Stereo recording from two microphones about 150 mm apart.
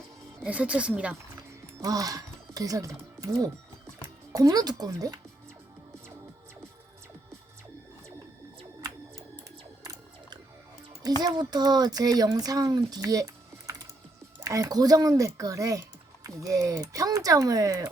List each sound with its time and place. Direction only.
0.4 s a woman's voice: 10° right (ahead or behind)
1.8 s speech: 25° right (ahead or behind)
4.3 s speech: 25° right (ahead or behind)
11.2 s speech: 25° right (ahead or behind)